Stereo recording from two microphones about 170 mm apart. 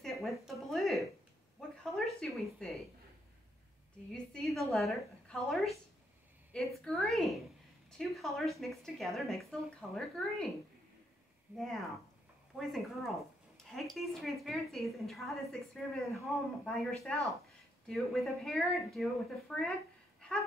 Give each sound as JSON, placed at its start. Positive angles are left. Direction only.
{"t": 0.0, "sound": "a sound", "side_deg": 0}
{"t": 2.1, "sound": "a woman's voice", "side_deg": 0}
{"t": 4.1, "sound": "a woman's voice", "side_deg": 0}
{"t": 11.5, "sound": "a woman's voice", "side_deg": 0}